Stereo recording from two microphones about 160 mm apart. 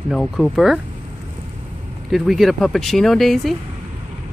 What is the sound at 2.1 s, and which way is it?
Speech, centre (ahead or behind).